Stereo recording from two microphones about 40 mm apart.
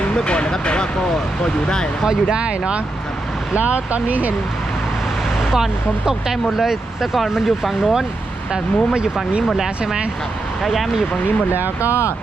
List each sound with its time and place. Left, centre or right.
0.2 s speech: left
2.3 s speech: right
5.4 s a sound: centre
6.3 s speech: centre
8.5 s speech: centre
10.6 s speech: centre